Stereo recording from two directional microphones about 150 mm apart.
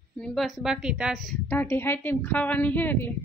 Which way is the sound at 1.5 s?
15° left (ahead or behind).